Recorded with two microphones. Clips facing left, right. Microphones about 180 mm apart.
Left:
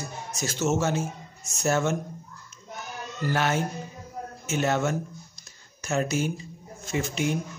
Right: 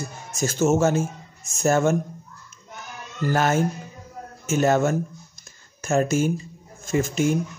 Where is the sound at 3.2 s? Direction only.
45° right (ahead or behind).